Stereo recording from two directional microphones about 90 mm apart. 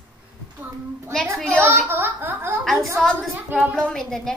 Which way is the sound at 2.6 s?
Centre (ahead or behind).